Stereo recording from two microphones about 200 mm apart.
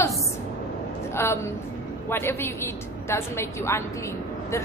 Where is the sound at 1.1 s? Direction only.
10° left (ahead or behind).